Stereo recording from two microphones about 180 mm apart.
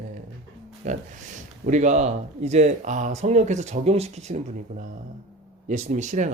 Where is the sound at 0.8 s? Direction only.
40° right (ahead or behind).